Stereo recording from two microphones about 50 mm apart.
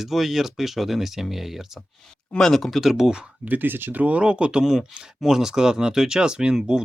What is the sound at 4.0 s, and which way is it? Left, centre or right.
Speech, right.